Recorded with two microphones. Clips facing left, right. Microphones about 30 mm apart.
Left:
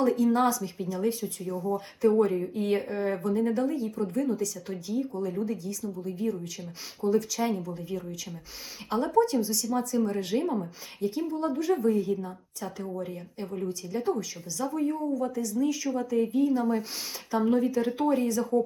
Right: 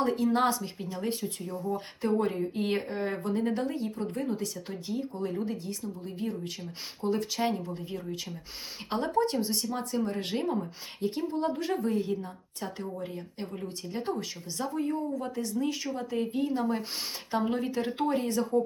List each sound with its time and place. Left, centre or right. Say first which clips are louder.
0.0 s a woman's voice: left 2 dB; right
2.1 s a woman's voice: left 2 dB; right
2.6 s speech: left 3 dB; right
2.8 s a woman's voice: left 3 dB; right
10.4 s speech: left 1 dB; centre
11.0 s a woman's voice: left 1 dB; right